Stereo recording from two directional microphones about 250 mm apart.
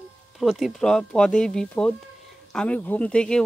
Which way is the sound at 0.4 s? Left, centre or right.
Centre.